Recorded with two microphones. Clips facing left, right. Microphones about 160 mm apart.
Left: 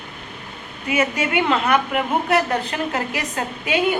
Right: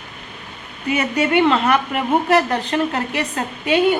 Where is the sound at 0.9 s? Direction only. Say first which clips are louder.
Right 3 dB; 35° right (ahead or behind).